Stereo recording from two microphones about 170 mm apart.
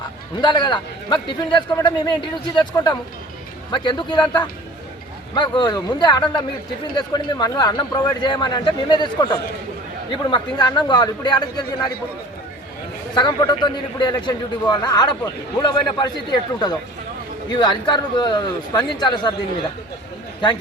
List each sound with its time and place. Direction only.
0.4 s speech: 25° left (ahead or behind)
13.1 s speech: 25° left (ahead or behind)